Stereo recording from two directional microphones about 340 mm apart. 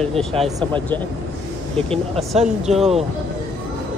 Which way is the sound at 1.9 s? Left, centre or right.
Centre.